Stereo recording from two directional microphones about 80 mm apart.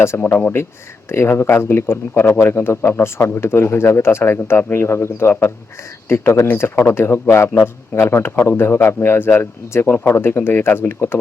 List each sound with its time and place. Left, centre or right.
0.0 s speech: left